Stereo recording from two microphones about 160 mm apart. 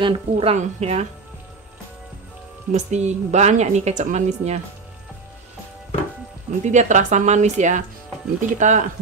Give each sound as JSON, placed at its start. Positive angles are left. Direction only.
{"t": 0.0, "sound": "speech", "side_deg": -35}
{"t": 2.7, "sound": "a woman's voice", "side_deg": -45}
{"t": 6.6, "sound": "a woman's voice", "side_deg": -50}